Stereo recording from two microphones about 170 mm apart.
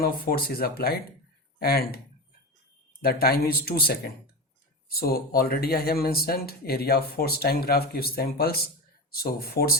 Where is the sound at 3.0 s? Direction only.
65° left (ahead or behind).